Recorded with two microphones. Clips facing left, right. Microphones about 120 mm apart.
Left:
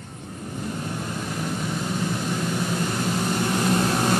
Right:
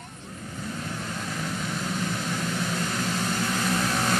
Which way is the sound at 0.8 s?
10° left (ahead or behind).